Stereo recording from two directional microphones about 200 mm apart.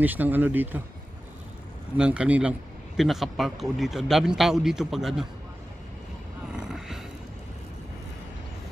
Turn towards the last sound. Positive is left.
turn(degrees=0)  # may be behind; listen again after turning